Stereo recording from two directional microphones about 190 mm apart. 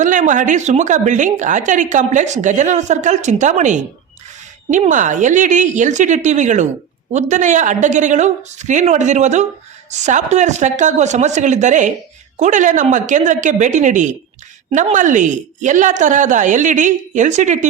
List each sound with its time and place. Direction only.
0.0 s a woman's voice: 40° right (ahead or behind)